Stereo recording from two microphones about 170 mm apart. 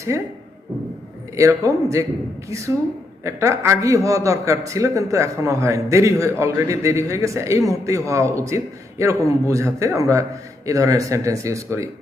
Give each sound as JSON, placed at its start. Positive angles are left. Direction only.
{"t": 0.1, "sound": "a man's voice", "side_deg": -15}
{"t": 1.4, "sound": "a man's voice", "side_deg": -20}
{"t": 3.2, "sound": "a man's voice", "side_deg": -15}